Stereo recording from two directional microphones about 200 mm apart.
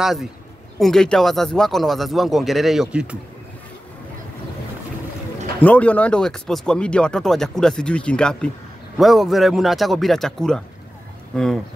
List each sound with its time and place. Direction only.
0.0 s speech: centre (ahead or behind)
5.6 s speech: 5° left (ahead or behind)